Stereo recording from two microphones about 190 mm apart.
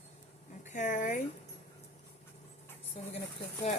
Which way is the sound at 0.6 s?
40° left (ahead or behind).